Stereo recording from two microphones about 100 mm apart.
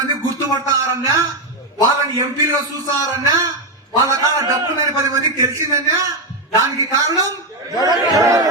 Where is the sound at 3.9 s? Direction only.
35° right (ahead or behind).